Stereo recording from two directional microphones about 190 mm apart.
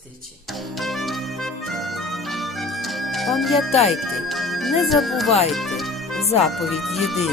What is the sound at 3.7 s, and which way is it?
Speech, 35° left (ahead or behind).